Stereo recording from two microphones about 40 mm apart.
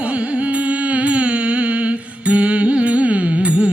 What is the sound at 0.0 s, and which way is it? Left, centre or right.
Music, right.